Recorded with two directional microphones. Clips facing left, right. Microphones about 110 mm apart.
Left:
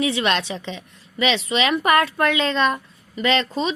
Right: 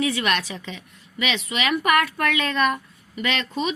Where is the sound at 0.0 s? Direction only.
25° left (ahead or behind).